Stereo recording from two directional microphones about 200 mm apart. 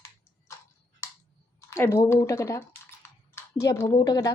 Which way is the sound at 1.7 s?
15° left (ahead or behind).